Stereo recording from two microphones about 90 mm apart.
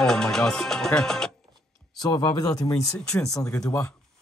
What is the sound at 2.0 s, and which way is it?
Speech, 50° left (ahead or behind).